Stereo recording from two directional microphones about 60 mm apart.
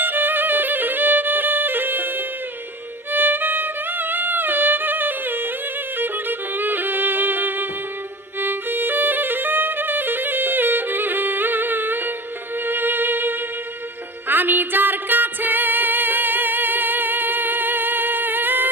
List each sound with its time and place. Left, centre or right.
0.0 s music: right